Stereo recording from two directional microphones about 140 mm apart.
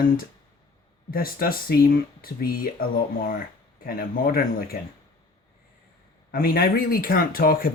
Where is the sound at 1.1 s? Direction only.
90° left.